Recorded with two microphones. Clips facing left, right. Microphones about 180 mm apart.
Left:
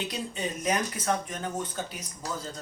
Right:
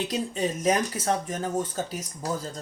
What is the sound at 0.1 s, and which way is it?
Speech, 40° right (ahead or behind).